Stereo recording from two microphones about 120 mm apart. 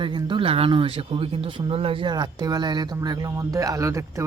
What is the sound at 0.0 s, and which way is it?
A man's voice, 45° right (ahead or behind).